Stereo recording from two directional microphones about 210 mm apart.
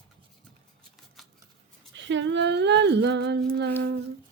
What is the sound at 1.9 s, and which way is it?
Humming, 60° right (ahead or behind).